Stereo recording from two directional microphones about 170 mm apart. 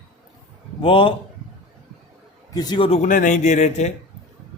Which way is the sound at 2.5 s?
25° left (ahead or behind).